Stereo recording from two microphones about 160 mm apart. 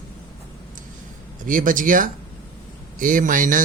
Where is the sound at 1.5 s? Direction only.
55° right (ahead or behind).